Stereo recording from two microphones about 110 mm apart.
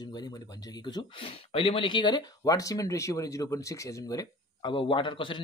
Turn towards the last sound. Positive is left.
turn(degrees=50)  # may be behind; listen again after turning